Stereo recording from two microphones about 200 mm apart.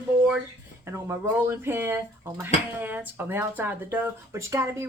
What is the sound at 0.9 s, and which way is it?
Speech, 15° right (ahead or behind).